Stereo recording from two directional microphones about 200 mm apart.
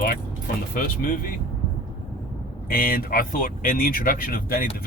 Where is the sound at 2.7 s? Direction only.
45° left (ahead or behind).